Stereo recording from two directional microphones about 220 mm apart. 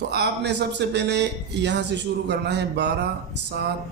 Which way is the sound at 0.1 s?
50° right (ahead or behind).